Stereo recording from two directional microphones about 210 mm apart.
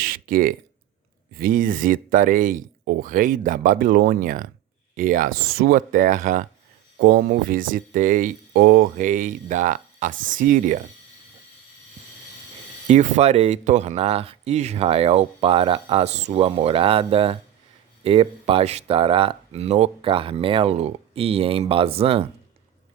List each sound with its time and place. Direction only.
0.0 s a sound: 45° right (ahead or behind)
1.4 s speech: 40° right (ahead or behind)
12.9 s speech: 35° right (ahead or behind)